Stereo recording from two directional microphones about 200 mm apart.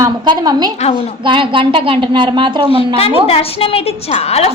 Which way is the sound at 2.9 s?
30° left (ahead or behind).